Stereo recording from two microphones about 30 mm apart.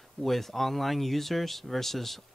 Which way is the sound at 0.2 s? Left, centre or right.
Centre.